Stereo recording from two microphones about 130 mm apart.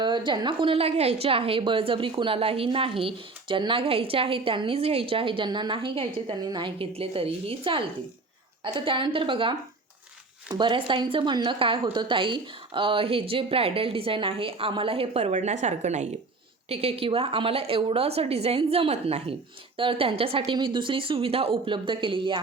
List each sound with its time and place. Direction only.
0.0 s a woman's voice: 35° right (ahead or behind); by 16.0 s 65° right (ahead or behind)
16.6 s speech: 50° right (ahead or behind)